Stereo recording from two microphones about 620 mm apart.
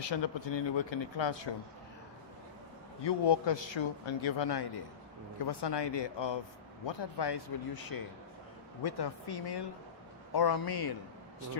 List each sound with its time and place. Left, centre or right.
0.0 s speech: left
3.0 s speech: left